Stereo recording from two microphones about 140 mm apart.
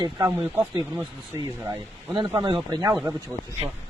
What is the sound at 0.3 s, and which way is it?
Speech, 15° right (ahead or behind).